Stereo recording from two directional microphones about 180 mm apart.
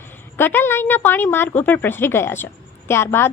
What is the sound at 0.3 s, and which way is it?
A woman's voice, 10° left (ahead or behind).